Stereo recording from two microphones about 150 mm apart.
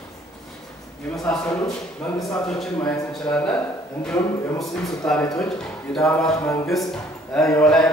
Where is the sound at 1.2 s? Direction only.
5° left (ahead or behind).